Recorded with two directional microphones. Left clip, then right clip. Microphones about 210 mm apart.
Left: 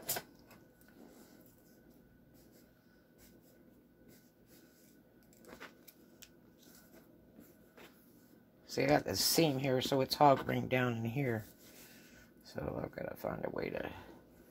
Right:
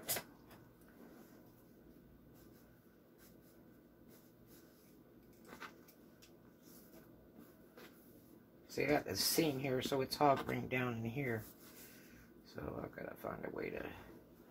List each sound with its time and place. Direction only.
8.6 s speech: 50° left (ahead or behind)
12.5 s speech: 45° left (ahead or behind)